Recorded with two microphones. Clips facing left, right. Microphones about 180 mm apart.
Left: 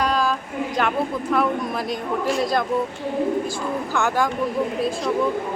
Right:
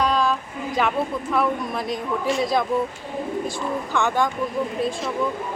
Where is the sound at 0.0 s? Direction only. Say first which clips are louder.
Even; centre (ahead or behind).